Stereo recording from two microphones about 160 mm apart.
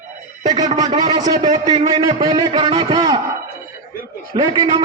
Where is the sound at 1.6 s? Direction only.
40° right (ahead or behind).